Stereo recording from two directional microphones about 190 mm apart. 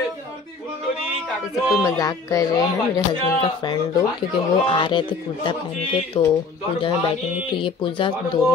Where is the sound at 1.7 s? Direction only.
20° left (ahead or behind).